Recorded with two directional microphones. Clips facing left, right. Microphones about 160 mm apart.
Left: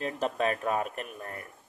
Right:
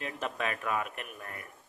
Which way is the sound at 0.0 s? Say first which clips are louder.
Left 6 dB; 35° left (ahead or behind).